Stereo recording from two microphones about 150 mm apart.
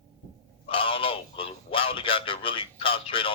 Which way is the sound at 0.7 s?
35° left (ahead or behind).